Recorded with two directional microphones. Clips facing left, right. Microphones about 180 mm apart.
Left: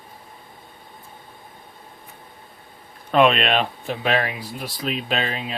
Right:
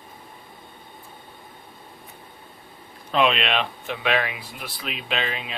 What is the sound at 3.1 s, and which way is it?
Speech, 50° left (ahead or behind).